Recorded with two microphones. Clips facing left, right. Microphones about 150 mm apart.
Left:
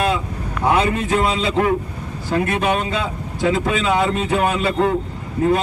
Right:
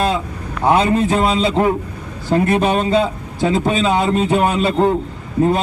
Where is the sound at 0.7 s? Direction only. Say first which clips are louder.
Right 4 dB; 30° right (ahead or behind).